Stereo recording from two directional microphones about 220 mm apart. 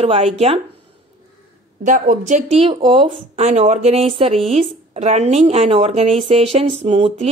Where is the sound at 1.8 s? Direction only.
35° right (ahead or behind).